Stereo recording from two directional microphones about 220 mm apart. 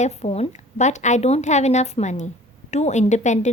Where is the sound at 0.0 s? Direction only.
30° left (ahead or behind).